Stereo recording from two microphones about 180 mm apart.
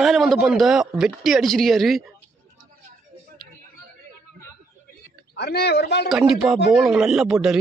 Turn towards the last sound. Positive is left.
turn(degrees=-5)  # may be behind; listen again after turning